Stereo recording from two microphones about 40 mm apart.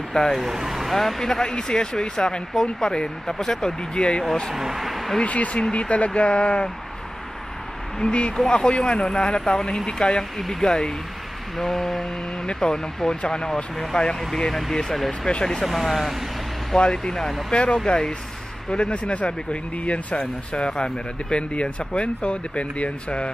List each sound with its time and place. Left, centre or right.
0.4 s speech: centre
0.9 s speech: centre; by 4.2 s left
4.6 s speech: centre
5.2 s speech: left
8.0 s speech: left
15.6 s speech: centre
16.7 s speech: centre